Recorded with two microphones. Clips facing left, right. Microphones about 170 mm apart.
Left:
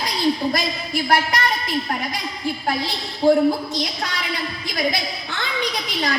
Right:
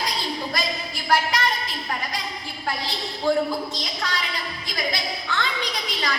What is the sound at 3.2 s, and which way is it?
Speech, 30° left (ahead or behind).